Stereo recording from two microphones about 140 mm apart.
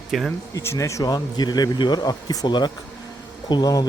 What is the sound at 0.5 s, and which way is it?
A man's voice, 20° left (ahead or behind).